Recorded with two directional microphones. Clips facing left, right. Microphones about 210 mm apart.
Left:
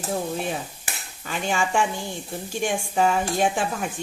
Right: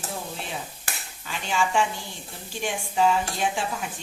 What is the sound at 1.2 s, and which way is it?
A woman's voice, 50° left (ahead or behind).